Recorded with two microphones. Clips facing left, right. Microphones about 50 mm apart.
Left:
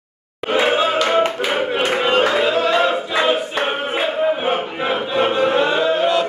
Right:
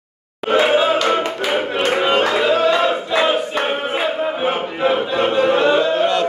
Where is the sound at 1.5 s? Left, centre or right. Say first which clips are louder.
Right 3 dB; centre.